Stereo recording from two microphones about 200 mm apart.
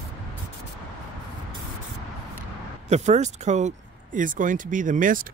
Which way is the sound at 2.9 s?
35° right (ahead or behind).